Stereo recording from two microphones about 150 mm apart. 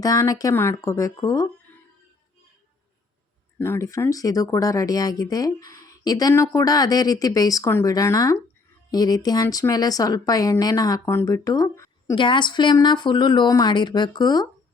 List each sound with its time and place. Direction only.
0.0 s speech: 25° left (ahead or behind)
3.6 s speech: 20° left (ahead or behind)
12.1 s a woman's voice: 35° left (ahead or behind)